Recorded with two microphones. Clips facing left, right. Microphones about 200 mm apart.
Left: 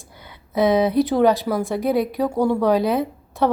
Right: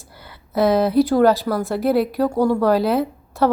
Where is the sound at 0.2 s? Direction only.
Centre (ahead or behind).